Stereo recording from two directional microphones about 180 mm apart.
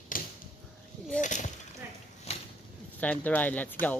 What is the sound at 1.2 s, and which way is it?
Speech, 45° left (ahead or behind).